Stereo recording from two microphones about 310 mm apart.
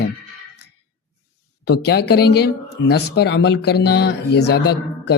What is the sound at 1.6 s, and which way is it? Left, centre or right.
A man's voice, left.